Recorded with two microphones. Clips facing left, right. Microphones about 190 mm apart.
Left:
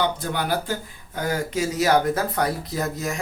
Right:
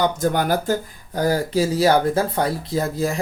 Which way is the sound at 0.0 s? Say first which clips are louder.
Right 5 dB; 45° right (ahead or behind).